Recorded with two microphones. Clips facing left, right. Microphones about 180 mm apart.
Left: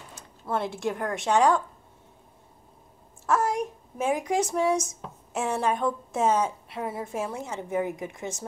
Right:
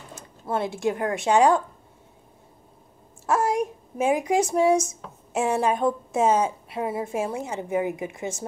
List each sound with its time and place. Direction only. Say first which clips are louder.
0.1 s speech: right 2 dB; 5° right (ahead or behind)
3.3 s a sound: right 2 dB; 10° right (ahead or behind)
5.3 s speech: right 4 dB; 10° right (ahead or behind)